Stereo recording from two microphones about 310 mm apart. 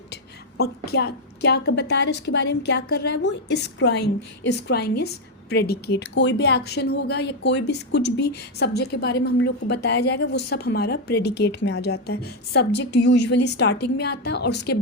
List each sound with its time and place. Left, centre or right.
0.1 s a woman's voice: left